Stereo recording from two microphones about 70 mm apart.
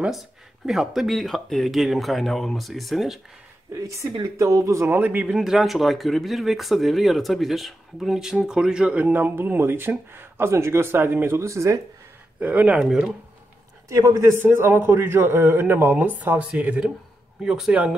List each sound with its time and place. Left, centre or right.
0.7 s speech: centre
3.7 s speech: right
4.8 s speech: right
5.3 s speech: centre
9.0 s speech: right
11.3 s speech: right
12.4 s speech: centre
13.8 s speech: right
14.4 s speech: right
16.2 s speech: right
17.4 s speech: centre